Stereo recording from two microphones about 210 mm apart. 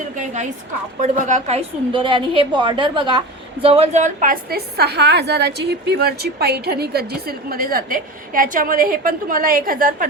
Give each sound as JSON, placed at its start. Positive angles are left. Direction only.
{"t": 1.0, "sound": "a woman's voice", "side_deg": -35}